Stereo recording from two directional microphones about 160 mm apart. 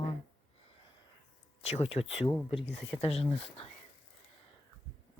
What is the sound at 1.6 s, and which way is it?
Speech, 40° left (ahead or behind).